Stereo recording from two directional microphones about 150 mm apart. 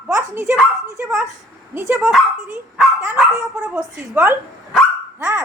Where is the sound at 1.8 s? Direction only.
15° right (ahead or behind).